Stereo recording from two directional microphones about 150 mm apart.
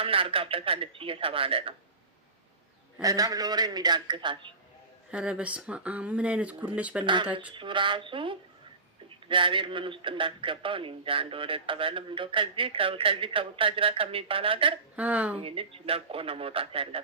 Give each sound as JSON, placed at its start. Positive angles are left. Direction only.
{"t": 0.0, "sound": "a man's voice", "side_deg": -40}
{"t": 3.0, "sound": "a man's voice", "side_deg": -25}
{"t": 5.1, "sound": "speech", "side_deg": -5}
{"t": 7.0, "sound": "a man's voice", "side_deg": -35}
{"t": 14.9, "sound": "speech", "side_deg": -10}
{"t": 15.4, "sound": "a man's voice", "side_deg": -40}